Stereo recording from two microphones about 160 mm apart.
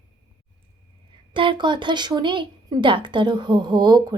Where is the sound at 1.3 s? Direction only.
30° right (ahead or behind).